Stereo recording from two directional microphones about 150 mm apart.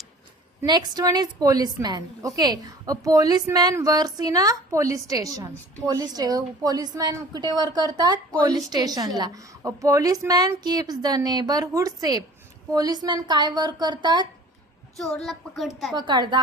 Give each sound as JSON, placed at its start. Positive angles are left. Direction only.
{"t": 0.6, "sound": "a woman's voice", "side_deg": -30}
{"t": 14.9, "sound": "speech", "side_deg": 0}
{"t": 16.0, "sound": "a woman's voice", "side_deg": -30}